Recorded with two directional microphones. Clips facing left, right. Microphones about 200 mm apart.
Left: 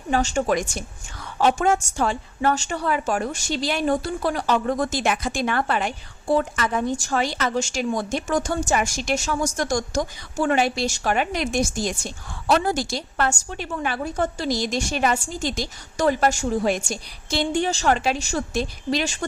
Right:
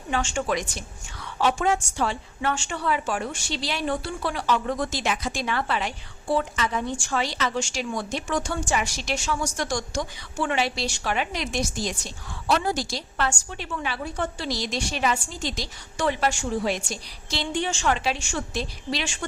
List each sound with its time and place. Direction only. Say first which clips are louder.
0.1 s a woman's voice: left 5 dB; 40° left (ahead or behind)